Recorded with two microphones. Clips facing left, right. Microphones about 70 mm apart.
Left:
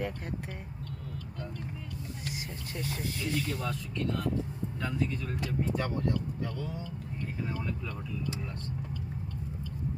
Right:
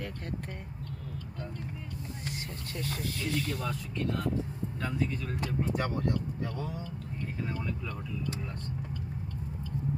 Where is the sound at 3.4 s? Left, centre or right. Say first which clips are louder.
Even; centre.